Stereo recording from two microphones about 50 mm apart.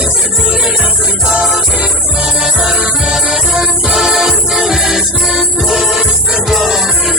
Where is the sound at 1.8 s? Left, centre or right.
Centre.